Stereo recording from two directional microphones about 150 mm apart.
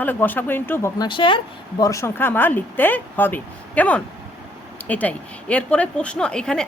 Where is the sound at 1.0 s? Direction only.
35° left (ahead or behind).